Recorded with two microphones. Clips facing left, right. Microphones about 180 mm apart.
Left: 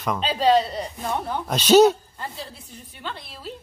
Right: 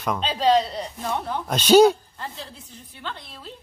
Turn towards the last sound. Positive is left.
turn(degrees=10)  # may be behind; listen again after turning